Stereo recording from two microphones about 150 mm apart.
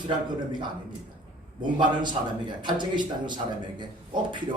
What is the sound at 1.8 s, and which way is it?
A man's voice, 30° right (ahead or behind).